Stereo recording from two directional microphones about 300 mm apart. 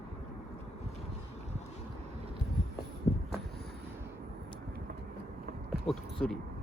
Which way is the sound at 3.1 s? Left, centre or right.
Centre.